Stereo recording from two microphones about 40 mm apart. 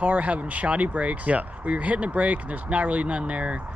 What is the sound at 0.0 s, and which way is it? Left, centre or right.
Speech, right.